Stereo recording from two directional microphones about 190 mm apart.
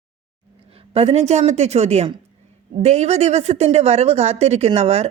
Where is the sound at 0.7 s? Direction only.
30° right (ahead or behind).